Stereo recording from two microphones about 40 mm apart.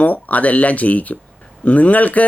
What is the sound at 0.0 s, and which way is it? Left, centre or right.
Speech, left.